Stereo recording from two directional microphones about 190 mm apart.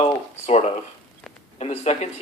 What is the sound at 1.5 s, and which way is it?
Speech, 35° left (ahead or behind).